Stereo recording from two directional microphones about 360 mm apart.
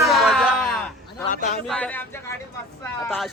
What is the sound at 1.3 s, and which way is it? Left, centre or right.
Speech, centre.